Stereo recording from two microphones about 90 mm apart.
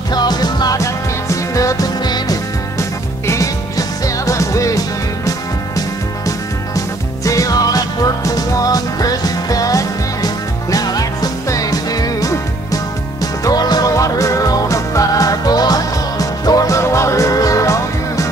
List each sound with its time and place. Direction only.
0.1 s music: 50° left (ahead or behind)